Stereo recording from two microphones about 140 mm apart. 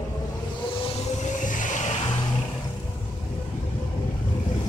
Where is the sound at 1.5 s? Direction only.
65° left (ahead or behind).